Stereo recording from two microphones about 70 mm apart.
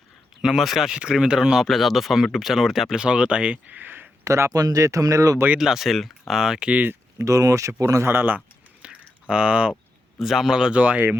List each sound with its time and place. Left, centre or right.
0.4 s speech: centre; by 4.1 s right
4.2 s speech: right
4.5 s speech: right
5.5 s speech: centre
7.2 s speech: right
8.0 s speech: right
8.8 s a sound: centre
10.2 s speech: centre; by 11.2 s right